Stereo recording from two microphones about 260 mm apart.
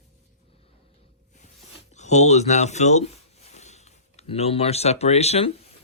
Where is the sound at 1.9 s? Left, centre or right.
Left.